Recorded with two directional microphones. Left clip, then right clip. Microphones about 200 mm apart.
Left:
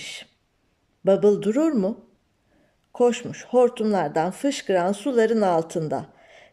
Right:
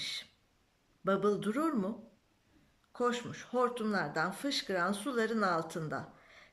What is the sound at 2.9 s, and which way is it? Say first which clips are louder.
Speech: left 13 dB; 35° left (ahead or behind).